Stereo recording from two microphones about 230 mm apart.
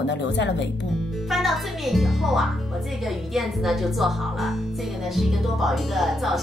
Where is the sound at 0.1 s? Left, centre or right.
Left.